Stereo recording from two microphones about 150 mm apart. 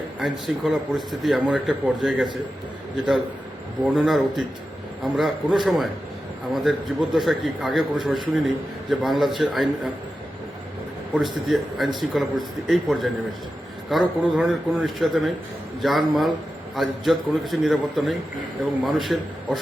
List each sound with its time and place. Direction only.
0.2 s a man's voice: 5° right (ahead or behind)
3.8 s a man's voice: 5° right (ahead or behind)
11.1 s a man's voice: centre (ahead or behind)